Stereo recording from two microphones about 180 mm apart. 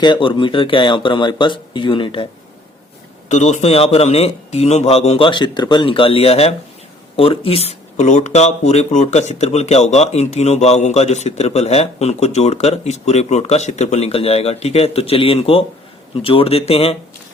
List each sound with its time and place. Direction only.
0.0 s speech: 25° left (ahead or behind)
3.2 s speech: 40° left (ahead or behind)